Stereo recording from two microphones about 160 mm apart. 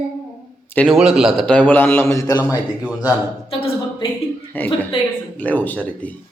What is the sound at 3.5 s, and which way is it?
Speech, 35° left (ahead or behind).